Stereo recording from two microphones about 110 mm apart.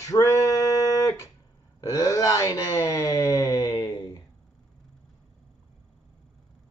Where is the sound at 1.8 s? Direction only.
30° left (ahead or behind).